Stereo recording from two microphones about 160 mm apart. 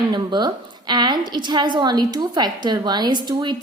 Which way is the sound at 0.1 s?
25° right (ahead or behind).